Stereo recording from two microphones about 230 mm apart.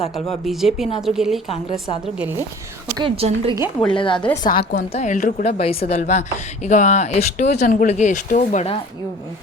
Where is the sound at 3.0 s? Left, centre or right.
Right.